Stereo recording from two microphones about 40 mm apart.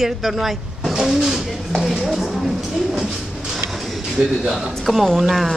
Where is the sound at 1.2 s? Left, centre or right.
Centre.